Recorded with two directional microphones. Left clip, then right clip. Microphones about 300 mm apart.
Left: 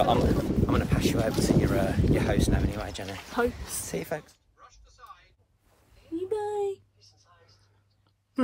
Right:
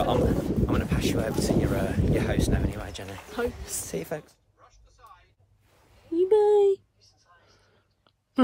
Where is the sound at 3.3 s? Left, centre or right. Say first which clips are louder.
Left 2 dB; centre.